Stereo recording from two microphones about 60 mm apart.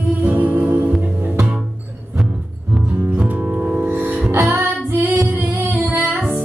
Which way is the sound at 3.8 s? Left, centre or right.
Right.